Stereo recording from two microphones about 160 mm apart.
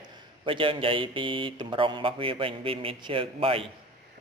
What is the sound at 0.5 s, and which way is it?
Speech, 35° right (ahead or behind).